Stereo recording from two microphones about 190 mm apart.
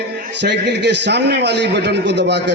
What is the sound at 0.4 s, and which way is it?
A man's voice, 65° right (ahead or behind).